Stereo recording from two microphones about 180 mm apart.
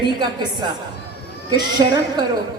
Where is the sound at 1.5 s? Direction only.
25° right (ahead or behind).